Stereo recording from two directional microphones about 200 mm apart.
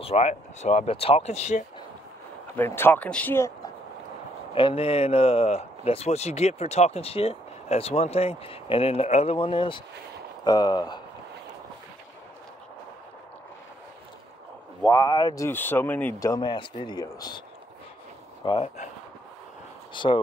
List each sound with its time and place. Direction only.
0.0 s speech: 30° left (ahead or behind)
2.5 s speech: 10° left (ahead or behind)
4.6 s speech: 25° left (ahead or behind)
14.8 s speech: 15° left (ahead or behind)
18.4 s speech: 25° left (ahead or behind)
19.9 s speech: 25° left (ahead or behind)